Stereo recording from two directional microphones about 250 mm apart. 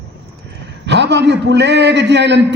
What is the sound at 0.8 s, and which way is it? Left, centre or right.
A man's voice, right.